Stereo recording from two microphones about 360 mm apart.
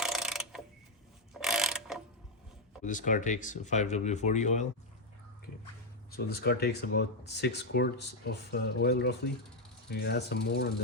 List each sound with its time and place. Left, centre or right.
0.0 s pulleys: centre
1.3 s mechanisms: centre
2.8 s speech: left
6.1 s speech: left